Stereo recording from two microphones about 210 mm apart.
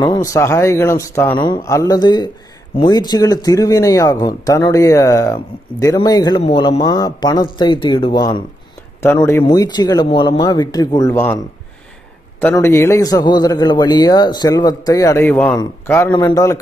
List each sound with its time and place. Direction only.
0.0 s speech: 15° left (ahead or behind)
12.4 s speech: 10° left (ahead or behind)